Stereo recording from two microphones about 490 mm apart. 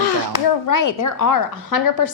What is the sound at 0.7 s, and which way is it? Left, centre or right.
Speech, left.